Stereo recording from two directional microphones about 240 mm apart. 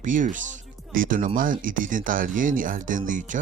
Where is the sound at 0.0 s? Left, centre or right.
Right.